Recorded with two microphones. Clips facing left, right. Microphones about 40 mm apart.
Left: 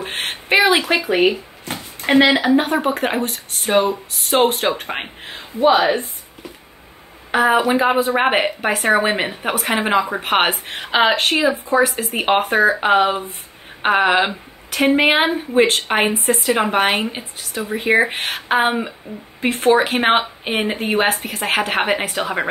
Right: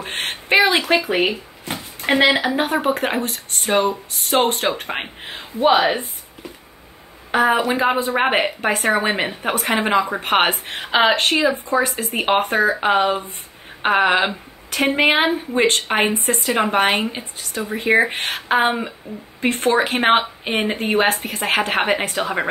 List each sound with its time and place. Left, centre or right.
0.0 s speech: centre
7.2 s speech: centre